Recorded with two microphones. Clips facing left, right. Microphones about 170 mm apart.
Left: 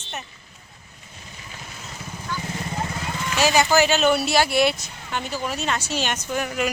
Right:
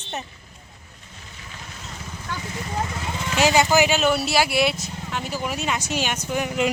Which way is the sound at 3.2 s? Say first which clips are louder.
Right 1 dB; 20° right (ahead or behind).